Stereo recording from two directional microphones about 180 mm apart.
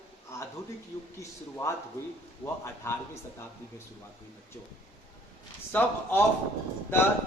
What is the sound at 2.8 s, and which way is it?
Speech, 15° left (ahead or behind).